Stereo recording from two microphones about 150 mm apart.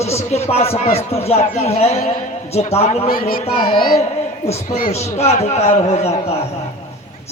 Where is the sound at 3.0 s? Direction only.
70° left (ahead or behind).